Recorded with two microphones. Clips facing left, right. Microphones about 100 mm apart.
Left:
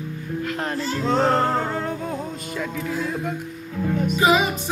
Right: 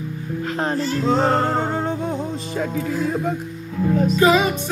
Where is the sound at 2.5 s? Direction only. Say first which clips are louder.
Right 3 dB; 40° right (ahead or behind).